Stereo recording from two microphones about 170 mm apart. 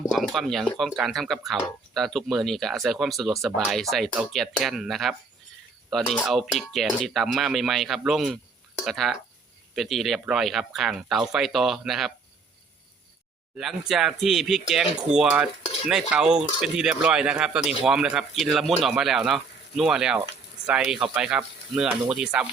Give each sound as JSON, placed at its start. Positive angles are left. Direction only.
{"t": 0.1, "sound": "speech", "side_deg": 0}
{"t": 6.2, "sound": "speech", "side_deg": 0}
{"t": 13.6, "sound": "speech", "side_deg": 0}